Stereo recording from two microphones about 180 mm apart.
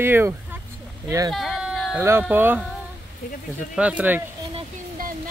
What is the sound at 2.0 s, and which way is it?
Speech, 15° right (ahead or behind).